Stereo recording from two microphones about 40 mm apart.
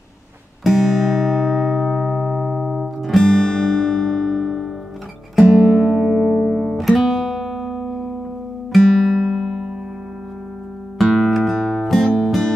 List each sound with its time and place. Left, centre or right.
0.7 s music: centre
3.3 s music: centre
6.0 s music: centre
9.4 s music: centre
11.1 s music: centre